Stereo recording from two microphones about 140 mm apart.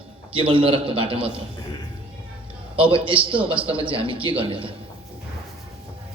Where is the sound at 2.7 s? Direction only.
40° right (ahead or behind).